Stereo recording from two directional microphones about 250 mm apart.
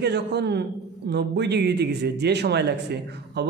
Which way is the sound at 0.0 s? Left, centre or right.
Right.